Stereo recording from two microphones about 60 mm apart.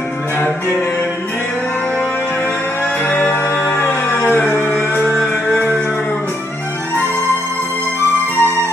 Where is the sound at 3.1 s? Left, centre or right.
Left.